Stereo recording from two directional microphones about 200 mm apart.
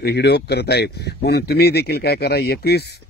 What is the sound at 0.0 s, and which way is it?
A man's voice, 55° left (ahead or behind).